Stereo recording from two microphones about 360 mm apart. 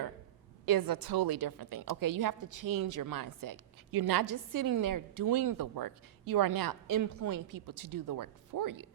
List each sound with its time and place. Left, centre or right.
0.6 s a woman's voice: right